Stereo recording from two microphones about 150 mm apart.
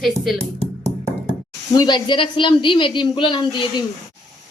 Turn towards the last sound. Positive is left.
turn(degrees=30)  # may be behind; listen again after turning